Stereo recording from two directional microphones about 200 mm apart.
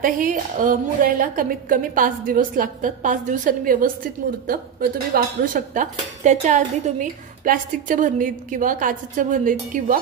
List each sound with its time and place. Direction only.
0.0 s a woman's voice: 40° right (ahead or behind)